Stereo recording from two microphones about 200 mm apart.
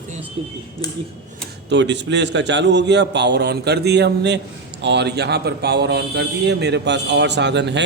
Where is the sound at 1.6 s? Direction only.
60° right (ahead or behind).